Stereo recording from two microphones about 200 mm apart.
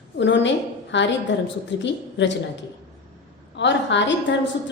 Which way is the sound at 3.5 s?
65° left (ahead or behind).